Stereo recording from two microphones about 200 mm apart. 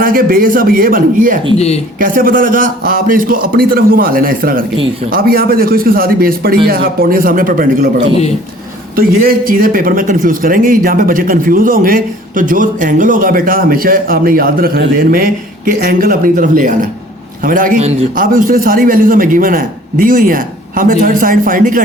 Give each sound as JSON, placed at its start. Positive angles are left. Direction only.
{"t": 0.0, "sound": "a man's voice", "side_deg": -45}
{"t": 1.5, "sound": "speech", "side_deg": 35}
{"t": 2.0, "sound": "a man's voice", "side_deg": -45}
{"t": 9.0, "sound": "a man's voice", "side_deg": -45}